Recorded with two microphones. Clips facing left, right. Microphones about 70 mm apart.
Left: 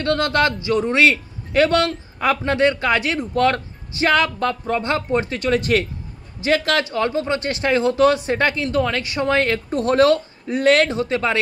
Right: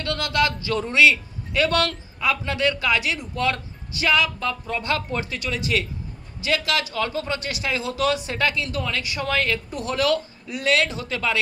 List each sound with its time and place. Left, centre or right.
0.0 s speech: left
0.7 s a man's voice: left
0.9 s a man's voice: left
1.7 s a man's voice: left
2.1 s speech: left
7.6 s speech: left
8.3 s speech: left